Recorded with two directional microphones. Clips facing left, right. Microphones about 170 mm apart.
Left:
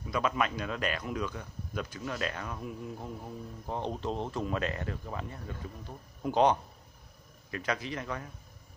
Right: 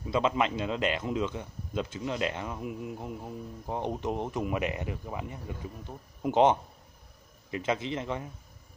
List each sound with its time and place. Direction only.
0.1 s speech: 25° right (ahead or behind)